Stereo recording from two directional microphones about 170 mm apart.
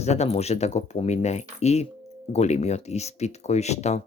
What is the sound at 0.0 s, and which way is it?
Speech, 40° left (ahead or behind).